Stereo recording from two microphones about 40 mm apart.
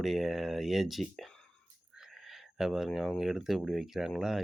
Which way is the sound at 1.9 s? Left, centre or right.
Centre.